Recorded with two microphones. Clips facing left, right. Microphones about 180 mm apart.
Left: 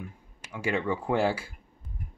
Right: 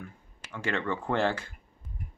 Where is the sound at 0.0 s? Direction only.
10° left (ahead or behind).